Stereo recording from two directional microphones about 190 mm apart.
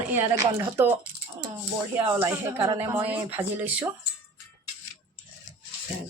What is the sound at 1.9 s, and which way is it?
Speech, 15° right (ahead or behind).